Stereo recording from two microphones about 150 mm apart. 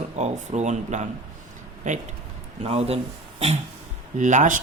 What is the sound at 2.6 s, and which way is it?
Speech, 40° right (ahead or behind).